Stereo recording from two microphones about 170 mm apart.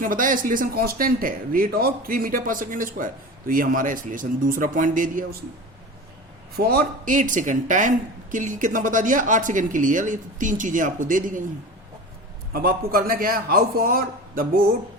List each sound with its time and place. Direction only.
0.0 s speech: 55° right (ahead or behind)
6.6 s speech: 60° right (ahead or behind)
12.5 s a man's voice: 60° right (ahead or behind)